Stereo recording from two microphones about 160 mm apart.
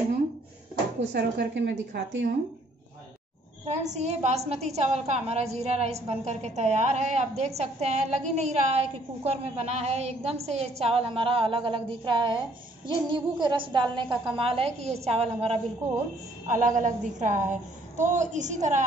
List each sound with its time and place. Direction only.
1.1 s a woman's voice: 90° right
3.6 s a woman's voice: 45° right (ahead or behind)
16.4 s a woman's voice: 50° right (ahead or behind)